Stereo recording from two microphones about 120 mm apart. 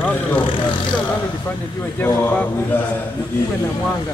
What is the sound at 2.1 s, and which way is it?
Speech, 20° left (ahead or behind).